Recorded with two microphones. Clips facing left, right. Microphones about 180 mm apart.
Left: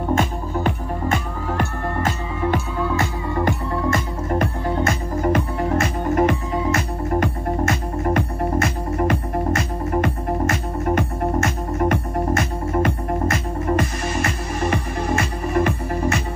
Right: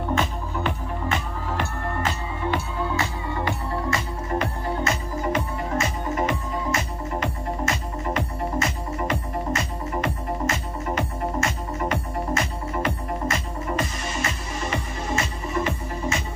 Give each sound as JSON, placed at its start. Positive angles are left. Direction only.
{"t": 0.1, "sound": "music", "side_deg": 45}